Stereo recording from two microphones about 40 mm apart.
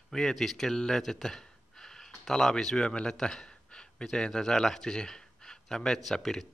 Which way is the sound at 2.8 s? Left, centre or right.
Centre.